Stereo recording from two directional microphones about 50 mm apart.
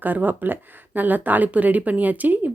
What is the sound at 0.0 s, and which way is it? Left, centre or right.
Speech, right.